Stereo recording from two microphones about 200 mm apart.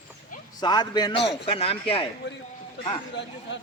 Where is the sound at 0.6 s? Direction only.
20° left (ahead or behind).